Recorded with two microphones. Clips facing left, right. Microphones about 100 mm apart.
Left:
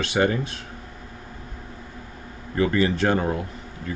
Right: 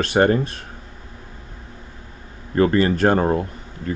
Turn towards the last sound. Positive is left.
turn(degrees=-40)  # may be behind; listen again after turning